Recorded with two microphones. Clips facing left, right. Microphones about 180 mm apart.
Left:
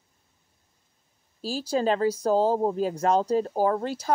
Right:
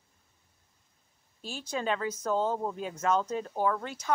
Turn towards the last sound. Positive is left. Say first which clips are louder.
# left 6 dB
turn(degrees=35)  # may be behind; listen again after turning